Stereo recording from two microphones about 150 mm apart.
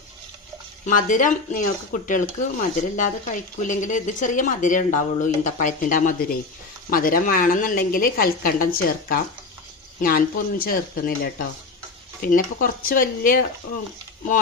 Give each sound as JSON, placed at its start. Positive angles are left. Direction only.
{"t": 0.9, "sound": "a woman's voice", "side_deg": 60}
{"t": 12.2, "sound": "a woman's voice", "side_deg": 70}